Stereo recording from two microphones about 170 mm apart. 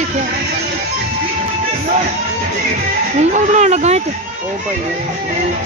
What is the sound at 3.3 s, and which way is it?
Speech, 45° right (ahead or behind).